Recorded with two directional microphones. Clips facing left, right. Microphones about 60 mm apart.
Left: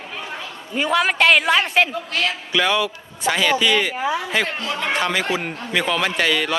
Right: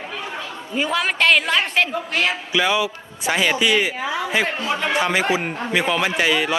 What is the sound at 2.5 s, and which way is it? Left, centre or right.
A man's voice, centre.